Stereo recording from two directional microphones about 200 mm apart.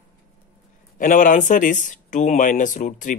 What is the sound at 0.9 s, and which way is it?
Speech, 40° left (ahead or behind).